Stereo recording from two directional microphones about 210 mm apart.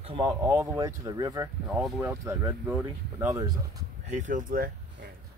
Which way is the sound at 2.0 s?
15° right (ahead or behind).